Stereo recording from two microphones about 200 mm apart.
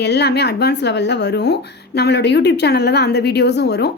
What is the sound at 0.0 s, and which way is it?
Speech, 55° left (ahead or behind).